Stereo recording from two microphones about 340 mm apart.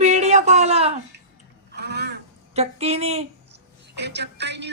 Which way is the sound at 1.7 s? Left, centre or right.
Right.